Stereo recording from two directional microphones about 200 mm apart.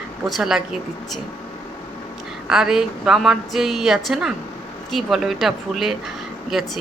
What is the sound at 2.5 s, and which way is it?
Speech, 5° right (ahead or behind).